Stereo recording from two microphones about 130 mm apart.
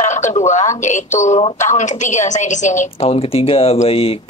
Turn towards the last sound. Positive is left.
turn(degrees=45)  # may be behind; listen again after turning